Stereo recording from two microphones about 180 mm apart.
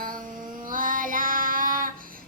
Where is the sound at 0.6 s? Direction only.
50° right (ahead or behind).